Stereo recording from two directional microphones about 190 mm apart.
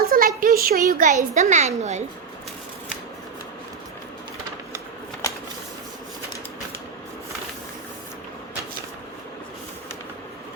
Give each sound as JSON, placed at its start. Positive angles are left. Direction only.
{"t": 0.0, "sound": "a sound", "side_deg": -50}
{"t": 0.3, "sound": "a child's voice", "side_deg": -50}
{"t": 1.3, "sound": "a woman's voice", "side_deg": -40}